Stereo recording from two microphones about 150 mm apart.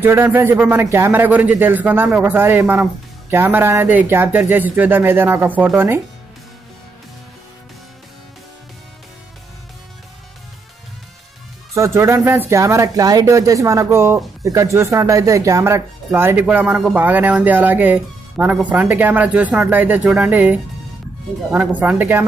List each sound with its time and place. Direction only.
0.0 s a man's voice: 15° right (ahead or behind)
11.7 s a man's voice: 20° right (ahead or behind)